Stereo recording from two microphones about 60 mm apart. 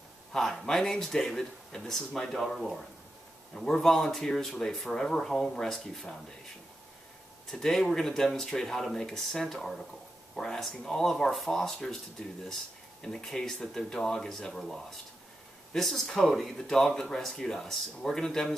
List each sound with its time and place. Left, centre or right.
0.3 s a man's voice: centre
7.5 s speech: centre
12.2 s speech: centre
13.0 s speech: centre